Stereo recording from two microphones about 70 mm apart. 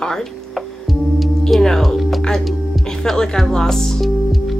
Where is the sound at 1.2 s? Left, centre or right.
Centre.